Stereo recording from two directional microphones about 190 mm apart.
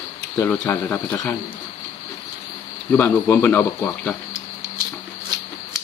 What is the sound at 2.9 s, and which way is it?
Speech, 10° left (ahead or behind).